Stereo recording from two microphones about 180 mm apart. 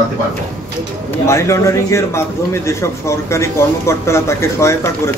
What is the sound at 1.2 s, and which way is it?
A man's voice, 15° left (ahead or behind).